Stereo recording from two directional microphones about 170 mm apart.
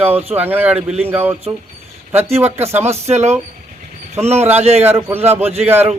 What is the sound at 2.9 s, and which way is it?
Speech, 40° right (ahead or behind).